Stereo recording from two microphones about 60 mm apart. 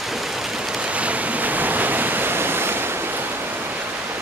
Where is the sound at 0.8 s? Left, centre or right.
Right.